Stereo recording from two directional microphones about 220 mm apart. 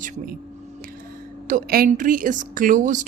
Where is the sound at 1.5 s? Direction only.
40° right (ahead or behind).